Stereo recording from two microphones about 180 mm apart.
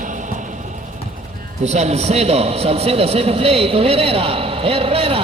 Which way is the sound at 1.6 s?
40° right (ahead or behind).